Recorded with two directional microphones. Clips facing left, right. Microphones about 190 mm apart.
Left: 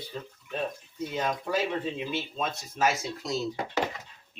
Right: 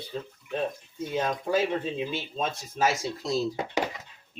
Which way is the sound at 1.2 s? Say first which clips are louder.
Right 2 dB; 25° right (ahead or behind).